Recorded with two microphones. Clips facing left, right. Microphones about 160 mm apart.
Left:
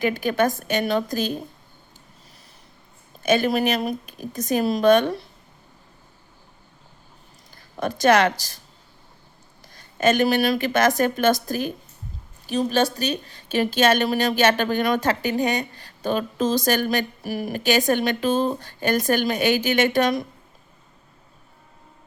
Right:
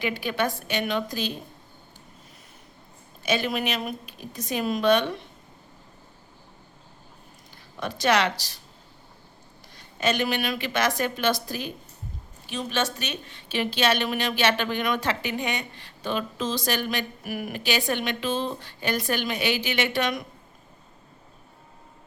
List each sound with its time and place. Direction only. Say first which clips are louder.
0.0 s a woman's voice: left 6 dB; 45° left (ahead or behind)
3.2 s a woman's voice: left 6 dB; 45° left (ahead or behind)
7.8 s a woman's voice: left 5 dB; 45° left (ahead or behind)
9.7 s a woman's voice: left 6 dB; 45° left (ahead or behind)